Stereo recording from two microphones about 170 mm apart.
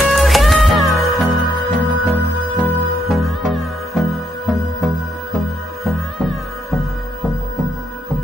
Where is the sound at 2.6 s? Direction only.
Centre (ahead or behind).